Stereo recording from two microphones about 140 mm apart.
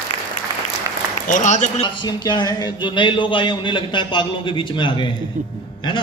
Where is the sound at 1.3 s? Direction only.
60° left (ahead or behind).